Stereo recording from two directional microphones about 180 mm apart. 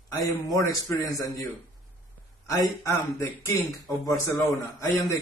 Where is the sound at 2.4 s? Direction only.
15° left (ahead or behind).